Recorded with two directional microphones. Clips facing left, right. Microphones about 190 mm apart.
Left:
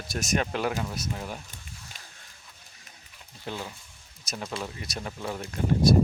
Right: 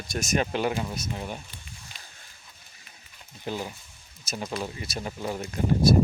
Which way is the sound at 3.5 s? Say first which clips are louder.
Right 4 dB; 15° right (ahead or behind).